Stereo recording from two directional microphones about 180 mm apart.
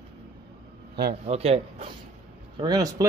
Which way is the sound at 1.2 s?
35° right (ahead or behind).